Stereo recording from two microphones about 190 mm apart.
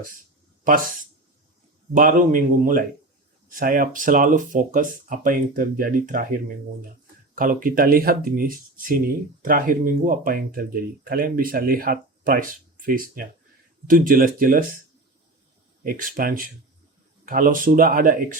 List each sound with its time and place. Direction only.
0.6 s speech: 45° right (ahead or behind)
7.3 s speech: 45° right (ahead or behind)
15.8 s speech: 45° right (ahead or behind)